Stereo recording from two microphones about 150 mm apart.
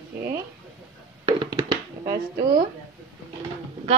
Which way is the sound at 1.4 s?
30° right (ahead or behind).